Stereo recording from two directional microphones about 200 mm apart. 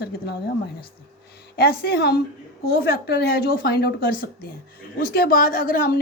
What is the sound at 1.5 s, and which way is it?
A woman's voice, 50° left (ahead or behind).